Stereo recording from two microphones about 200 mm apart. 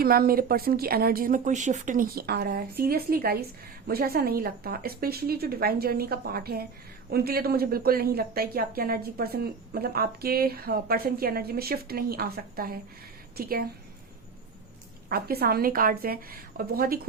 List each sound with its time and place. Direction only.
0.0 s a woman's voice: 50° right (ahead or behind)
15.1 s a woman's voice: 50° right (ahead or behind)